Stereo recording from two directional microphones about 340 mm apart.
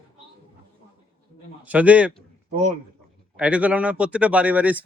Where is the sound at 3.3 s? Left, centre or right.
Centre.